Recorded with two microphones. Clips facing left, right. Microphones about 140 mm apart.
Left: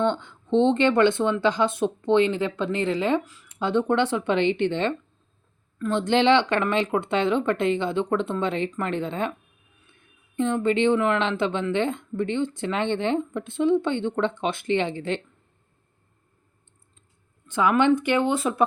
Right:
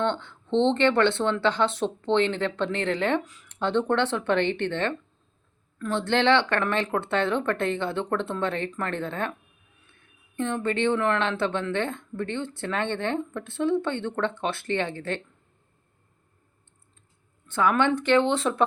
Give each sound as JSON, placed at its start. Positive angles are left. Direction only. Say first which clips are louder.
{"t": 0.0, "sound": "speech", "louder": "left 3 dB", "side_deg": 10}
{"t": 10.3, "sound": "speech", "louder": "left 4 dB", "side_deg": 15}
{"t": 17.5, "sound": "speech", "louder": "left 3 dB", "side_deg": 10}